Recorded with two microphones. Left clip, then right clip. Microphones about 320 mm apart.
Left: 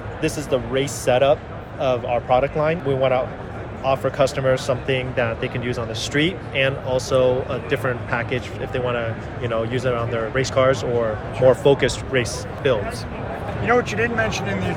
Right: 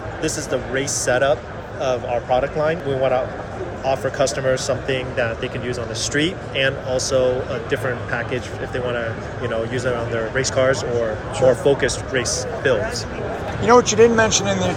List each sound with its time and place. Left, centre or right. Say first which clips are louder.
0.2 s speech: left 1 dB; left
13.7 s speech: right 7 dB; centre